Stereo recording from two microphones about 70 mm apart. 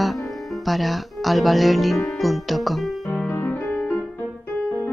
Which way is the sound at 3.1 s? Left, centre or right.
Left.